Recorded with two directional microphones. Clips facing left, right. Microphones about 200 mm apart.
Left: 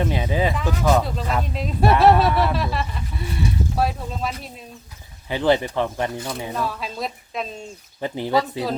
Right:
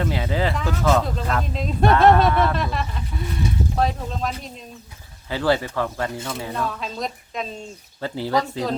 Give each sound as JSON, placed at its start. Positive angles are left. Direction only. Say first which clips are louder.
{"t": 0.0, "sound": "speech", "louder": "left 1 dB", "side_deg": 15}
{"t": 5.3, "sound": "speech", "louder": "left 2 dB", "side_deg": 20}
{"t": 6.5, "sound": "speech", "louder": "even", "side_deg": 5}
{"t": 8.0, "sound": "speech", "louder": "left 1 dB", "side_deg": 20}
{"t": 8.4, "sound": "speech", "louder": "left 1 dB", "side_deg": 10}